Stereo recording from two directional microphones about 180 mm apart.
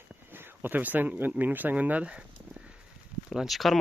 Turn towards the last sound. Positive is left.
turn(degrees=0)  # may be behind; listen again after turning